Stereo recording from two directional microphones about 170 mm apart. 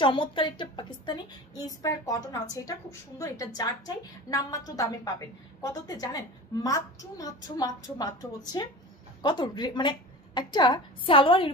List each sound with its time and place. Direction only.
0.0 s a woman's voice: 30° left (ahead or behind)